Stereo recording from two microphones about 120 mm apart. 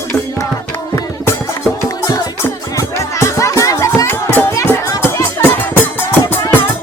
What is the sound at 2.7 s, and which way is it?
Music, 25° left (ahead or behind).